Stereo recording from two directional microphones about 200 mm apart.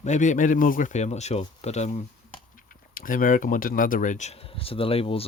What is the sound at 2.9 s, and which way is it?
Speech, 45° left (ahead or behind).